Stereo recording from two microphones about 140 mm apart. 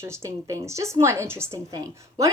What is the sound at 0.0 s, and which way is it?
A woman's voice, 20° right (ahead or behind).